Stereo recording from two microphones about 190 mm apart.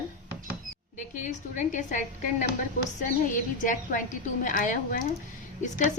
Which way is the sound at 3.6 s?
45° left (ahead or behind).